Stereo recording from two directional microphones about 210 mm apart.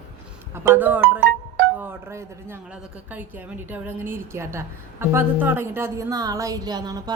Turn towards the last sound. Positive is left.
turn(degrees=-20)  # may be behind; listen again after turning